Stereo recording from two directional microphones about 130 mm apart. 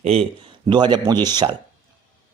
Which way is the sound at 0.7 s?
35° right (ahead or behind).